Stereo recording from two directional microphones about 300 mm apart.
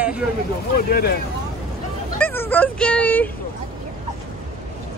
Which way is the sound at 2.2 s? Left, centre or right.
Centre.